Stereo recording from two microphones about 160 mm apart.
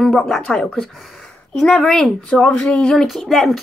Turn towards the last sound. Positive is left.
turn(degrees=0)  # may be behind; listen again after turning